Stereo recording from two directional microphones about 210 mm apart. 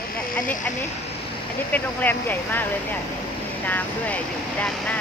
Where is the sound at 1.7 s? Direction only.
10° left (ahead or behind).